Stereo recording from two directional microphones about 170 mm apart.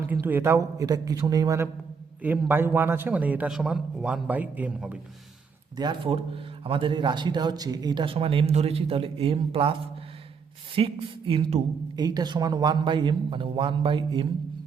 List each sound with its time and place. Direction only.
0.1 s a man's voice: 10° right (ahead or behind)
5.7 s a man's voice: 25° right (ahead or behind)
10.8 s a man's voice: 35° right (ahead or behind)